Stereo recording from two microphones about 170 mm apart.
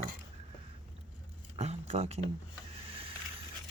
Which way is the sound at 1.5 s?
40° right (ahead or behind).